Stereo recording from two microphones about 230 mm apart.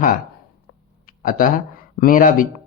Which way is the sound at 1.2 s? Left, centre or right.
Left.